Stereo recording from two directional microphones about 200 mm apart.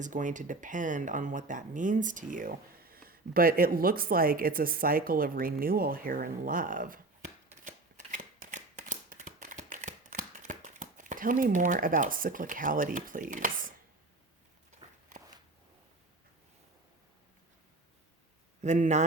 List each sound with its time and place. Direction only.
0.0 s speech: 40° right (ahead or behind)
7.6 s shuffling cards: 40° right (ahead or behind)
18.6 s a man's voice: 35° right (ahead or behind)